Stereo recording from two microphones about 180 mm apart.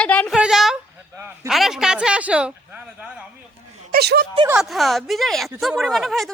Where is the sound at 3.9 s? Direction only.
60° right (ahead or behind).